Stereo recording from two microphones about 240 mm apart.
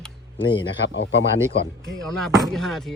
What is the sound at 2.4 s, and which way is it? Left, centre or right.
Speech, centre.